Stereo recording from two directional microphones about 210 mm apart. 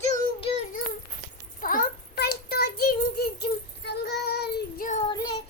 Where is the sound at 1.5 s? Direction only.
40° left (ahead or behind).